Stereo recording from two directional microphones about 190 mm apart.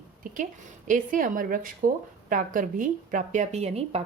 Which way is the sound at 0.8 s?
45° right (ahead or behind).